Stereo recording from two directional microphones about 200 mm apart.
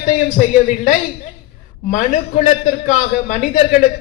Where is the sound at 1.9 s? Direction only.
40° left (ahead or behind).